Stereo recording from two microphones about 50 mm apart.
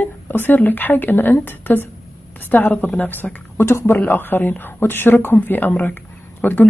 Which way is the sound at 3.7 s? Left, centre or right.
Left.